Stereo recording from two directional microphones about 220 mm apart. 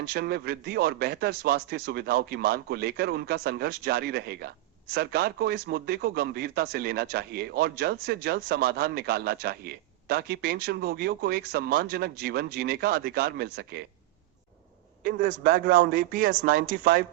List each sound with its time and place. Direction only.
0.0 s speech: 45° right (ahead or behind)
15.0 s a man's voice: 40° right (ahead or behind)